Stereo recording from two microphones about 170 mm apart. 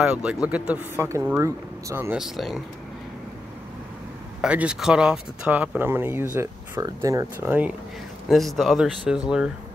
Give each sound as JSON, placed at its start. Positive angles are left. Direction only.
{"t": 0.0, "sound": "speech", "side_deg": -5}
{"t": 2.1, "sound": "speech", "side_deg": 0}
{"t": 4.4, "sound": "speech", "side_deg": -5}
{"t": 8.3, "sound": "speech", "side_deg": 0}